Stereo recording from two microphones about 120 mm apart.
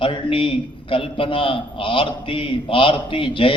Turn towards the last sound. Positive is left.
turn(degrees=45)  # may be behind; listen again after turning